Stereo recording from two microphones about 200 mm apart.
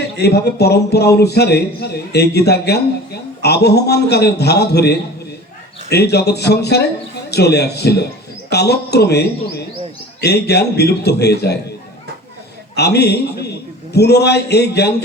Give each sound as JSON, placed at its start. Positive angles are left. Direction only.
{"t": 0.2, "sound": "a man's voice", "side_deg": 55}
{"t": 12.7, "sound": "a man's voice", "side_deg": 55}